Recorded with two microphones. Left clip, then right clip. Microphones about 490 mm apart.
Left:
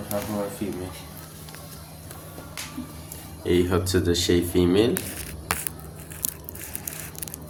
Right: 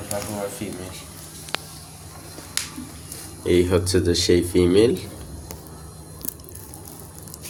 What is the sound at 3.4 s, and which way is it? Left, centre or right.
Speech, left.